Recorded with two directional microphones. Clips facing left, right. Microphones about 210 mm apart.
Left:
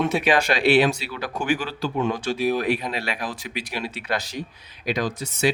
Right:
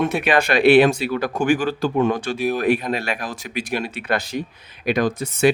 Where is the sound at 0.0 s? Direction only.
55° right (ahead or behind).